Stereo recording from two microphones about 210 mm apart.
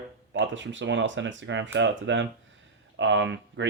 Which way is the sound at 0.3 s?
60° right (ahead or behind).